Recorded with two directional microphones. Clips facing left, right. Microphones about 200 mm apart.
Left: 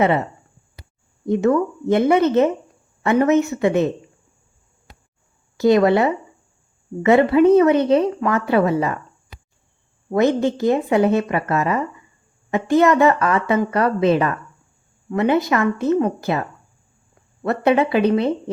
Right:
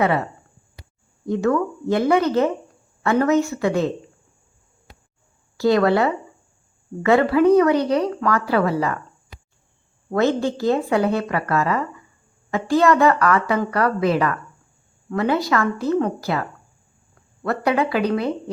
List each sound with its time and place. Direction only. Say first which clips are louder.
1.2 s a woman's voice: left 3 dB; 20° left (ahead or behind)
5.5 s a woman's voice: left 2 dB; 20° left (ahead or behind)
10.1 s a woman's voice: left 2 dB; 20° left (ahead or behind)